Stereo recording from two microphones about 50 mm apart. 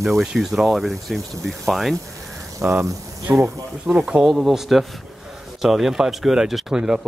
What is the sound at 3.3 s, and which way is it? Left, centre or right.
Speech, right.